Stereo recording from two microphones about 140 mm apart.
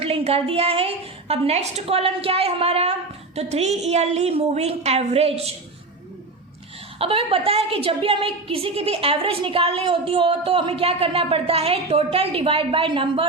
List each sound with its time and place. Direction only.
0.0 s a woman's voice: 45° right (ahead or behind)
7.0 s a woman's voice: 40° right (ahead or behind)